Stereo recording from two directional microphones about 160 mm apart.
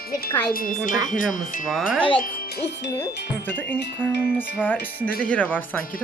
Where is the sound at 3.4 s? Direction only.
10° left (ahead or behind).